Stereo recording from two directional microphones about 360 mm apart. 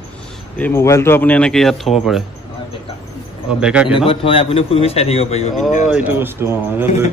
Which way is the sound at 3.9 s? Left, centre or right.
Centre.